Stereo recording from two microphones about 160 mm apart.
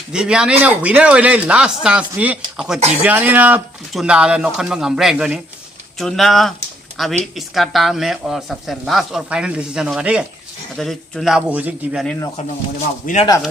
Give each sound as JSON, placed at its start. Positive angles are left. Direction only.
{"t": 0.1, "sound": "a man's voice", "side_deg": -5}
{"t": 13.0, "sound": "speech", "side_deg": 60}